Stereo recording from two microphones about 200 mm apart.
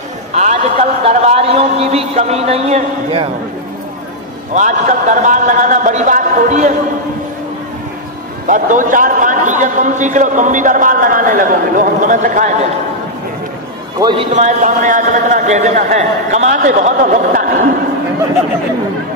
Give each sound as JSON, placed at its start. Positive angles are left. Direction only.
{"t": 0.3, "sound": "a sound", "side_deg": -35}
{"t": 4.6, "sound": "a man's voice", "side_deg": -40}
{"t": 8.5, "sound": "a man's voice", "side_deg": -40}
{"t": 13.9, "sound": "a man's voice", "side_deg": -20}
{"t": 14.3, "sound": "a man's voice", "side_deg": -35}